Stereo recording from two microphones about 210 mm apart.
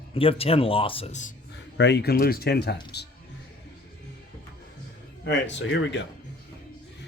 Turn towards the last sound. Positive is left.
turn(degrees=55)  # may be behind; listen again after turning